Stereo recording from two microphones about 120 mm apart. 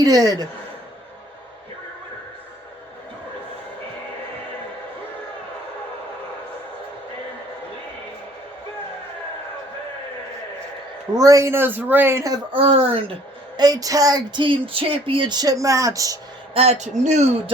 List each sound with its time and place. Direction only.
0.0 s speech: 30° right (ahead or behind)
11.2 s speech: 25° right (ahead or behind)
12.5 s speech: 50° right (ahead or behind)
13.6 s speech: 30° right (ahead or behind)
16.6 s speech: 65° right (ahead or behind)